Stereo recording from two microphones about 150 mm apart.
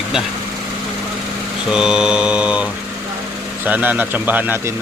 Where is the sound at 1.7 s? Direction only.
5° right (ahead or behind).